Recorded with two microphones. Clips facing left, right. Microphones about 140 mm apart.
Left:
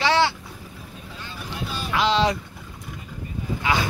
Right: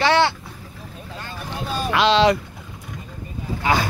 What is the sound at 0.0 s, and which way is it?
Vehicle, 60° right (ahead or behind).